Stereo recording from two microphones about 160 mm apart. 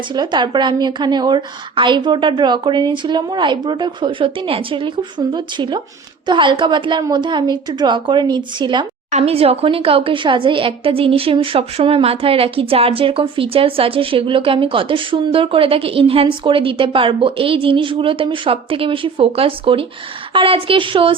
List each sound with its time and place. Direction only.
0.1 s a woman's voice: 30° right (ahead or behind)